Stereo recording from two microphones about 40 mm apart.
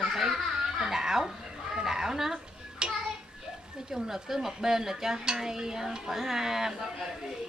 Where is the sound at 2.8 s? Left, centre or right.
Right.